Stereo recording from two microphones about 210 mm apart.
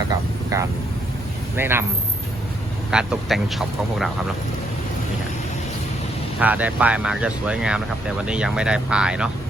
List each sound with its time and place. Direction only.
0.5 s a man's voice: 15° right (ahead or behind)
2.9 s speech: 5° right (ahead or behind)
6.4 s speech: 5° right (ahead or behind)